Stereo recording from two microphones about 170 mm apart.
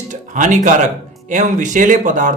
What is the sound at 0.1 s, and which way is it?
Speech, 45° right (ahead or behind).